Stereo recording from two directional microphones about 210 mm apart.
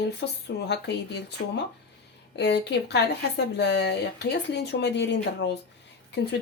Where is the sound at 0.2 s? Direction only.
60° left (ahead or behind).